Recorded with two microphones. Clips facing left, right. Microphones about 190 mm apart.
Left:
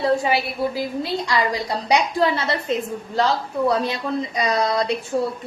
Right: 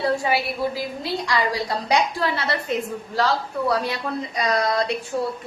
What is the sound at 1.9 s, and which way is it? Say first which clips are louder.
A woman's voice: left 4 dB; 20° left (ahead or behind).